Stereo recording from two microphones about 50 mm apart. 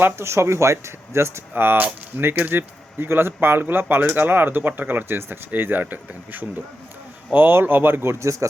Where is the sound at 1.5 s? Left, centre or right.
Right.